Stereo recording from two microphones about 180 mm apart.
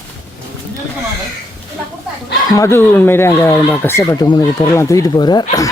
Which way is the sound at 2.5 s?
15° left (ahead or behind).